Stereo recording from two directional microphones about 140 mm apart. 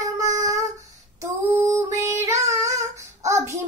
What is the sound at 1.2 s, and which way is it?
Child singing, 20° right (ahead or behind).